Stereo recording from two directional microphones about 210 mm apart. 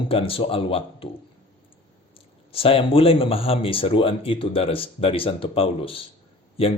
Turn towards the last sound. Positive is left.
turn(degrees=25)  # may be behind; listen again after turning